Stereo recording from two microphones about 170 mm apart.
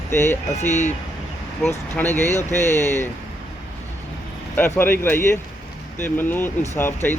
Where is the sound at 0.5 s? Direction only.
45° left (ahead or behind).